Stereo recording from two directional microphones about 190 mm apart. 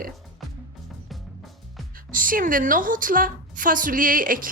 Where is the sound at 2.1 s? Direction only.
45° right (ahead or behind).